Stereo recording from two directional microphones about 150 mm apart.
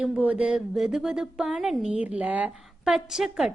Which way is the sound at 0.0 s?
10° right (ahead or behind).